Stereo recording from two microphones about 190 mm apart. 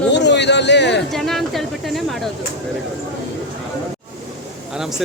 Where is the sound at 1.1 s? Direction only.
Centre (ahead or behind).